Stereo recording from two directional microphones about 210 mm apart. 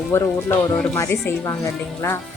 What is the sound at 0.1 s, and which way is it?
A woman's voice, 10° left (ahead or behind).